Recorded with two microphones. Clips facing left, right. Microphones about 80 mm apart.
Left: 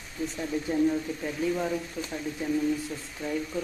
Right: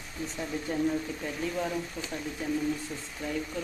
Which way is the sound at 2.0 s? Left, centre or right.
Centre.